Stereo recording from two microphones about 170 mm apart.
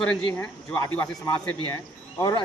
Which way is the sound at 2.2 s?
25° left (ahead or behind).